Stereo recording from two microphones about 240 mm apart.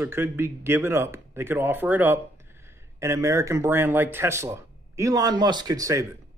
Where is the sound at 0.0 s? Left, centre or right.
Centre.